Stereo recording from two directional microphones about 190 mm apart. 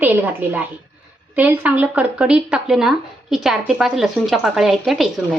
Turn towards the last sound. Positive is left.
turn(degrees=0)  # may be behind; listen again after turning